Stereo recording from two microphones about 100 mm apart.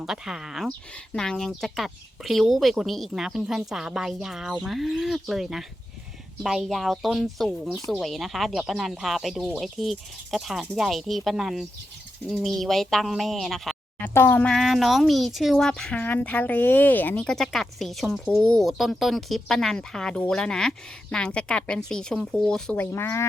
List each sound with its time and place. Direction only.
0.0 s speech: 5° right (ahead or behind)
0.9 s speech: 5° left (ahead or behind)
14.0 s speech: 25° left (ahead or behind)
14.4 s speech: centre (ahead or behind); by 17.2 s 20° left (ahead or behind)
17.2 s speech: 5° left (ahead or behind)
22.8 s speech: 25° left (ahead or behind)